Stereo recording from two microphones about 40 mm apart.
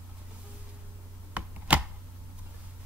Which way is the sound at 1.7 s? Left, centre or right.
Right.